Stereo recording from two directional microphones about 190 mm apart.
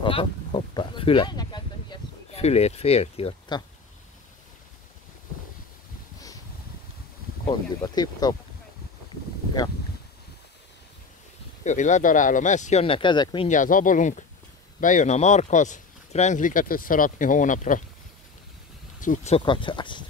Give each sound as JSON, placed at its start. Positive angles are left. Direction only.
{"t": 0.0, "sound": "a sound", "side_deg": 25}
{"t": 2.4, "sound": "speech", "side_deg": 35}
{"t": 7.4, "sound": "speech", "side_deg": 20}
{"t": 11.6, "sound": "speech", "side_deg": 40}
{"t": 13.5, "sound": "speech", "side_deg": 45}
{"t": 18.9, "sound": "speech", "side_deg": 45}
{"t": 19.3, "sound": "speech", "side_deg": 25}